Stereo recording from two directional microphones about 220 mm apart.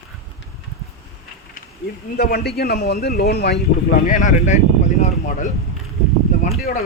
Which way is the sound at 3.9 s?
35° left (ahead or behind).